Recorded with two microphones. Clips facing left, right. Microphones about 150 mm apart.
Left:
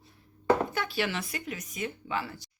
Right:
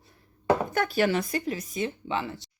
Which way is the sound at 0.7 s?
45° right (ahead or behind).